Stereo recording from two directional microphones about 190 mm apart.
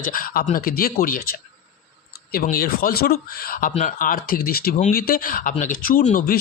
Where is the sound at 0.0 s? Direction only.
45° left (ahead or behind).